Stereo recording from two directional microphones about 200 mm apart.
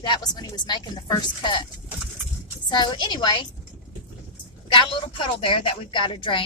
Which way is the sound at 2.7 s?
20° left (ahead or behind).